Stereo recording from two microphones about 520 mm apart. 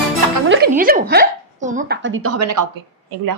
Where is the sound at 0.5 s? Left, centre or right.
Centre; by 2.6 s right.